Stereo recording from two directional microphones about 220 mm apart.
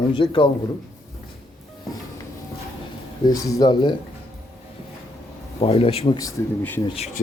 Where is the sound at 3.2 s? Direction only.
15° left (ahead or behind).